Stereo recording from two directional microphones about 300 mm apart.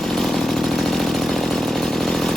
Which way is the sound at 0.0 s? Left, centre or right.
Centre.